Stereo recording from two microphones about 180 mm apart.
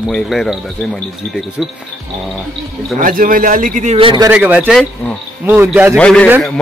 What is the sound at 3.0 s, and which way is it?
A man's voice, 50° right (ahead or behind).